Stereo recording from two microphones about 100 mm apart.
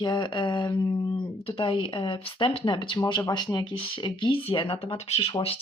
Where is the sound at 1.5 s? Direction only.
60° left (ahead or behind).